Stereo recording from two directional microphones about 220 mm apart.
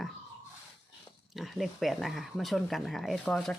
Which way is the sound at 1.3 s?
Centre (ahead or behind).